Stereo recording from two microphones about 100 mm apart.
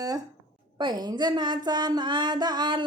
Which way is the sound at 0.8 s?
45° right (ahead or behind).